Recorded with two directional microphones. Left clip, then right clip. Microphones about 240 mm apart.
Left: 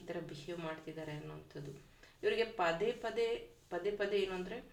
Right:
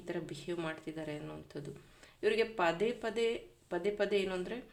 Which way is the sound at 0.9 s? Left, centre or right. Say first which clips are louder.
Right 4 dB; right.